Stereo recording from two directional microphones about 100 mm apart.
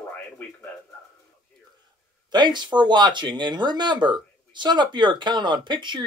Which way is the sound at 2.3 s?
45° right (ahead or behind).